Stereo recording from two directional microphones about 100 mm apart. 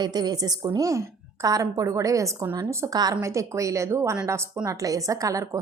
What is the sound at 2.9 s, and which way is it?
A woman's voice, 40° right (ahead or behind).